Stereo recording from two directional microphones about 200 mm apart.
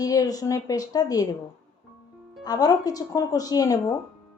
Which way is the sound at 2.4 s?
20° left (ahead or behind).